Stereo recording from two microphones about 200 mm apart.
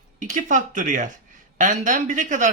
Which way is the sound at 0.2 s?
40° right (ahead or behind).